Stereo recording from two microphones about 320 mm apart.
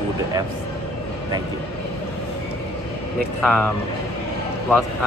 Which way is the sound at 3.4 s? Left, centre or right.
Centre.